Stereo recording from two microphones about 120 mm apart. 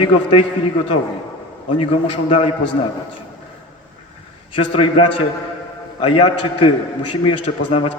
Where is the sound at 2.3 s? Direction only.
65° left (ahead or behind).